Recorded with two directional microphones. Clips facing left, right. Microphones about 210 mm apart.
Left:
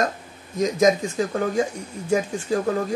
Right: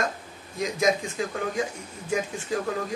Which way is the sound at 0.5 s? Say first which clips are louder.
Left 6 dB; 45° left (ahead or behind).